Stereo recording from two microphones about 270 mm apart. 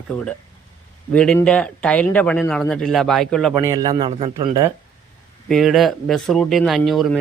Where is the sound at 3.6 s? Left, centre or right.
Centre.